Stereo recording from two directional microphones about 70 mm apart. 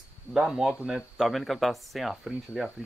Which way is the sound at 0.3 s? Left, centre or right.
Centre.